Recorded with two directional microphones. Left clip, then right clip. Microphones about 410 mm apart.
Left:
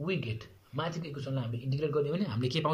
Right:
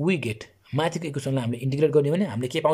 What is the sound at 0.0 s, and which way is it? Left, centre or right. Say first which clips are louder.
Speech: right 9 dB; right.